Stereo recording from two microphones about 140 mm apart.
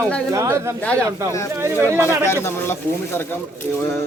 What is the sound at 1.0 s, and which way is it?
A man's voice, 20° right (ahead or behind).